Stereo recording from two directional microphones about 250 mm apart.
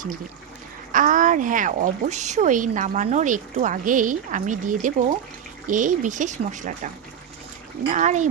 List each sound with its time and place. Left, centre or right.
0.9 s speech: right
7.9 s speech: right